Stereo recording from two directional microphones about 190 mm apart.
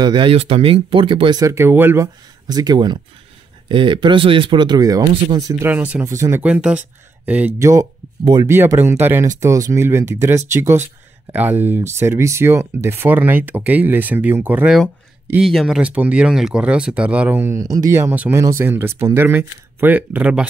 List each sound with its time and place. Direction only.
0.0 s speech: 25° right (ahead or behind); by 20.4 s 10° right (ahead or behind)